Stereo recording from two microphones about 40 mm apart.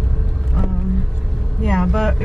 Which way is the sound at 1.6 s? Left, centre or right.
Centre.